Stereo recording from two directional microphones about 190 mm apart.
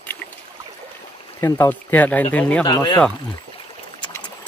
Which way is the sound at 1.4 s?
10° left (ahead or behind).